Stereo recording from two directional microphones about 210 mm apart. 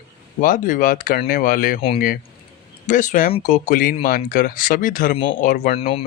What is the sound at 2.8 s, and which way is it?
Speech, 35° left (ahead or behind).